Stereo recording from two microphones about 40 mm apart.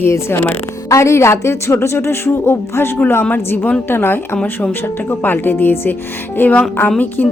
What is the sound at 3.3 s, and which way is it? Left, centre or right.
A woman's voice, left.